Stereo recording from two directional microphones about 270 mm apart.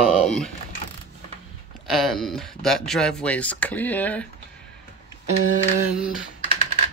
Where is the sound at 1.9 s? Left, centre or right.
Centre.